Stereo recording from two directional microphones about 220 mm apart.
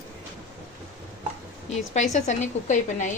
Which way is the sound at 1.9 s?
30° left (ahead or behind).